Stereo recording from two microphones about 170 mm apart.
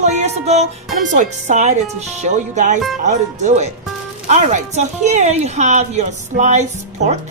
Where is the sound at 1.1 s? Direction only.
45° right (ahead or behind).